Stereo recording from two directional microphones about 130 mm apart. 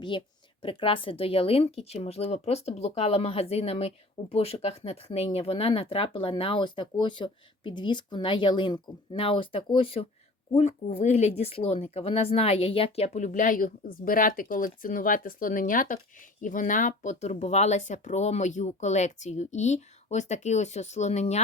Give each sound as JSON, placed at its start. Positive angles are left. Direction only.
{"t": 0.1, "sound": "a woman's voice", "side_deg": 40}
{"t": 10.6, "sound": "speech", "side_deg": 55}